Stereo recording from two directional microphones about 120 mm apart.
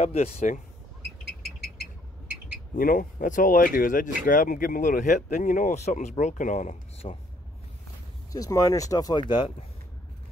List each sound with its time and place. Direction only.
0.0 s speech: 65° left (ahead or behind)
3.3 s speech: 90° left
8.3 s speech: 30° left (ahead or behind); by 9.7 s 45° left (ahead or behind)